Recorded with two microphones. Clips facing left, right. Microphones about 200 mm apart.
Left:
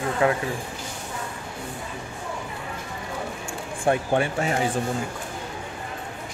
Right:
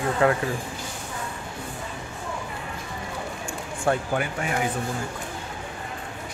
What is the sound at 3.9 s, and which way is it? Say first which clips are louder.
Speech: left 3 dB; 25° left (ahead or behind).